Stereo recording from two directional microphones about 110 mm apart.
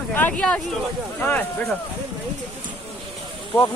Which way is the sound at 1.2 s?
15° left (ahead or behind).